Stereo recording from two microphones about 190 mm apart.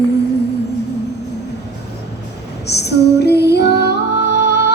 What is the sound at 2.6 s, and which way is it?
Music, 60° left (ahead or behind).